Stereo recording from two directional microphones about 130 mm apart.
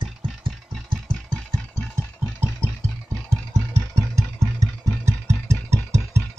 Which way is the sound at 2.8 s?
25° right (ahead or behind).